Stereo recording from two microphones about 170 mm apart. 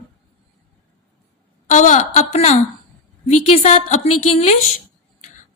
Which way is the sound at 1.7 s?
45° left (ahead or behind).